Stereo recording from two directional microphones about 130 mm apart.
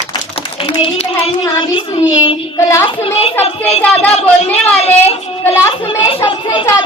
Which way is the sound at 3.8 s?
15° left (ahead or behind).